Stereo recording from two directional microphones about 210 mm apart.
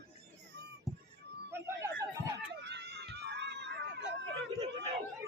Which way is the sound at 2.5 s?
55° right (ahead or behind).